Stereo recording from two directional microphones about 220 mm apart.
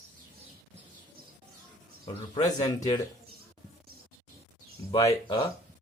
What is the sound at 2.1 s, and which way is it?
Speech, 20° left (ahead or behind).